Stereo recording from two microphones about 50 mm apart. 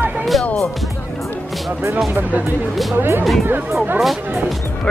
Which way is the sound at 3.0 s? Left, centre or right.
Right.